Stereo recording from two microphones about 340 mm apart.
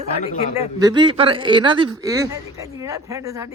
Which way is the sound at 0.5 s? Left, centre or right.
Centre.